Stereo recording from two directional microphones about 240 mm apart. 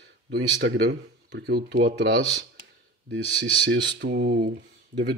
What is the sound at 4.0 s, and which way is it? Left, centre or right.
Speech, right.